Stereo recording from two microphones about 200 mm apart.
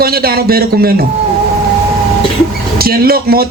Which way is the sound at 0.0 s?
50° right (ahead or behind).